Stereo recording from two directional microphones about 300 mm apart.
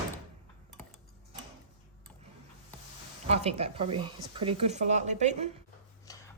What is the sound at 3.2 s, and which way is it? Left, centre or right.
Speech, right.